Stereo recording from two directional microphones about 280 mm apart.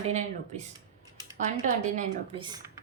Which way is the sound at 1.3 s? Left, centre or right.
Right.